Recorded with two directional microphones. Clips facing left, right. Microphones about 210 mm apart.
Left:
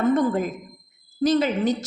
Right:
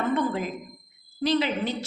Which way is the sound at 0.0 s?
45° left (ahead or behind).